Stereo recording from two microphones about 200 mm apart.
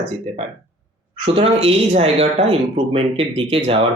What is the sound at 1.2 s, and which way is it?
Speech, 30° right (ahead or behind).